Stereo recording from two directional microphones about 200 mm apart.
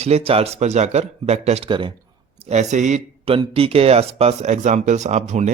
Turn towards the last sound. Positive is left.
turn(degrees=-35)  # may be behind; listen again after turning